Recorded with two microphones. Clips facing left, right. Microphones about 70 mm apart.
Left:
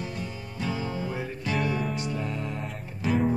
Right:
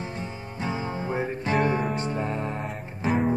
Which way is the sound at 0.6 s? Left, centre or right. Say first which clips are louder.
Right 2 dB; right.